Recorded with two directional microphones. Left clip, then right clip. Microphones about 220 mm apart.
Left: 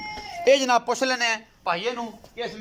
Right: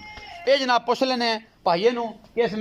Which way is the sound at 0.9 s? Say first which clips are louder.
Right 1 dB; 10° right (ahead or behind).